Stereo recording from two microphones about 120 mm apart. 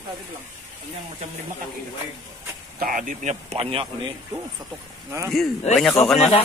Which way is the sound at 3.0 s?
75° right (ahead or behind).